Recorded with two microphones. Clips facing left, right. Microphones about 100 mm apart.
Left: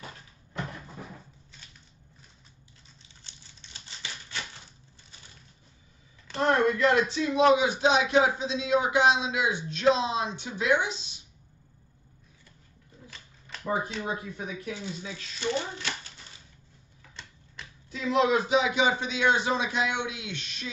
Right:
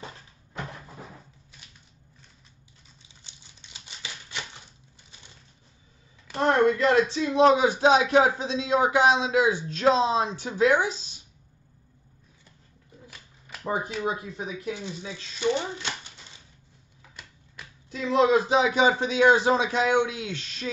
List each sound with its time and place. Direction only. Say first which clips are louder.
3.3 s typewriter: even; 15° right (ahead or behind)
6.4 s speech: right 2 dB; 30° right (ahead or behind)
14.0 s speech: right 4 dB; 20° right (ahead or behind)
17.1 s typewriter: left 1 dB; 5° right (ahead or behind)
17.9 s speech: right 3 dB; 30° right (ahead or behind)